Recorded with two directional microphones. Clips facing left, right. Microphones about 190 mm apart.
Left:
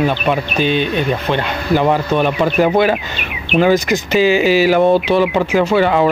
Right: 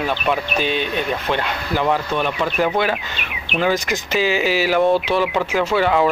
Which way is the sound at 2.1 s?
45° left (ahead or behind).